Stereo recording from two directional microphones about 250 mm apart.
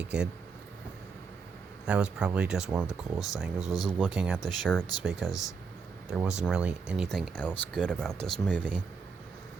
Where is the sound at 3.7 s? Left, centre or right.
Centre.